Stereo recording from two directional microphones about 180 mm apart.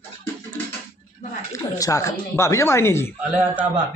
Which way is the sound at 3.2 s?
5° right (ahead or behind).